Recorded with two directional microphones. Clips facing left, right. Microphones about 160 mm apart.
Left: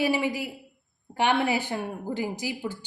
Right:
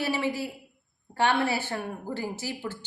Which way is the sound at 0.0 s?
15° left (ahead or behind).